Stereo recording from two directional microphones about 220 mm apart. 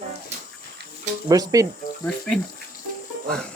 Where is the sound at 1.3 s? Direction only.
15° right (ahead or behind).